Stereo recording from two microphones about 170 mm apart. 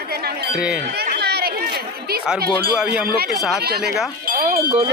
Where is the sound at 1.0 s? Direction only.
70° right (ahead or behind).